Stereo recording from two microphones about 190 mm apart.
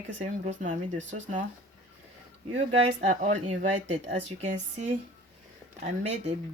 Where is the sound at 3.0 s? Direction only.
40° right (ahead or behind).